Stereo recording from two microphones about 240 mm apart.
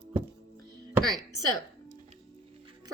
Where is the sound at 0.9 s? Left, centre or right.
Centre.